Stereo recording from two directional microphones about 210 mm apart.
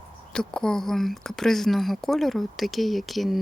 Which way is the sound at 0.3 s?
5° left (ahead or behind).